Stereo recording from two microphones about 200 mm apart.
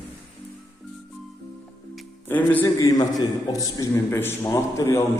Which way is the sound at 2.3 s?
10° left (ahead or behind).